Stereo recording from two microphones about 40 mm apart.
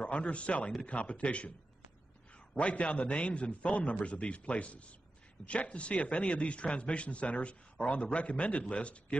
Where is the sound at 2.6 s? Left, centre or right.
Left.